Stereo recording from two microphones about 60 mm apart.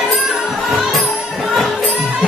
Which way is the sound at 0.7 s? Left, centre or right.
Centre.